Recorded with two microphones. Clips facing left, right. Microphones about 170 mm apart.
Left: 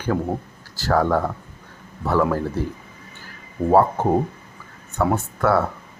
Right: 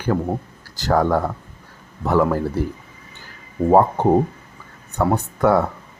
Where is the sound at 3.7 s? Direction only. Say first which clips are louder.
Right 2 dB; 15° right (ahead or behind).